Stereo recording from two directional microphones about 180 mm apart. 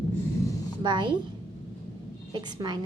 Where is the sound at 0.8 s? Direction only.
25° right (ahead or behind).